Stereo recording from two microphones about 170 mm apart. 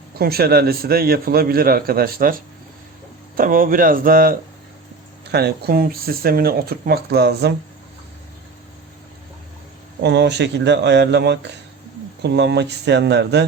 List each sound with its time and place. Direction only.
0.2 s a man's voice: 65° right (ahead or behind)
5.3 s a man's voice: 70° right (ahead or behind)
10.0 s speech: 85° right